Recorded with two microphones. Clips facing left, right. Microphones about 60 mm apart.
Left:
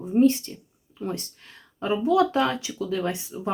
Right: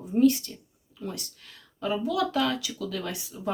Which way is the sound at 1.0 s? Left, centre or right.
Left.